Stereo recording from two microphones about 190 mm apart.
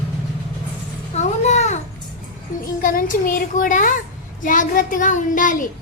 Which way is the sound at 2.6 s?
45° left (ahead or behind).